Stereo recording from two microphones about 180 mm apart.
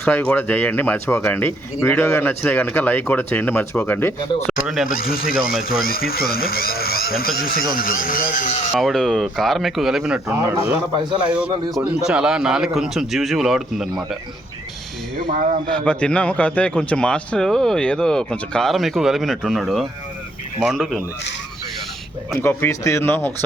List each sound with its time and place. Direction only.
0.0 s speech: 5° left (ahead or behind)
4.6 s a man's voice: centre (ahead or behind)
4.9 s speech: 50° left (ahead or behind)
5.4 s a man's voice: centre (ahead or behind)
5.8 s speech: 55° left (ahead or behind)
8.7 s a man's voice: centre (ahead or behind)
15.3 s a man's voice: 45° right (ahead or behind)
15.7 s a man's voice: 5° left (ahead or behind)
22.4 s speech: 15° left (ahead or behind)